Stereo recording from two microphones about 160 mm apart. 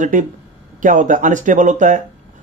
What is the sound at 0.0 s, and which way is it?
A man's voice, 55° right (ahead or behind).